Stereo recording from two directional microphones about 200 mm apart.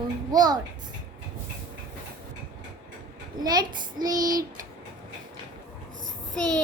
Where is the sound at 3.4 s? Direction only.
20° right (ahead or behind).